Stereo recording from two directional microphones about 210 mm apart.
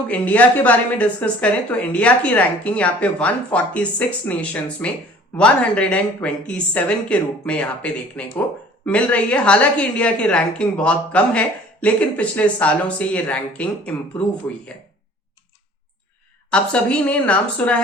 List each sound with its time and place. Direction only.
0.1 s a woman's voice: 5° left (ahead or behind)
16.5 s a woman's voice: 5° left (ahead or behind)